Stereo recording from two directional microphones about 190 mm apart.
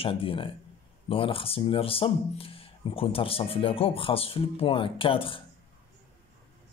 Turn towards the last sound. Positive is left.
turn(degrees=25)  # may be behind; listen again after turning